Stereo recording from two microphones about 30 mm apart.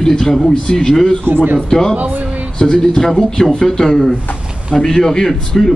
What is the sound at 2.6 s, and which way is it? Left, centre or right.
Speech, left.